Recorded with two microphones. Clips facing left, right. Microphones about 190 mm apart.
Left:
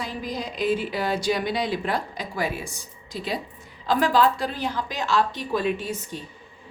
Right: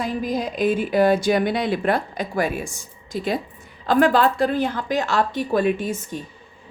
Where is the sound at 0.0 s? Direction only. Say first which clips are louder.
Right 7 dB; 50° right (ahead or behind).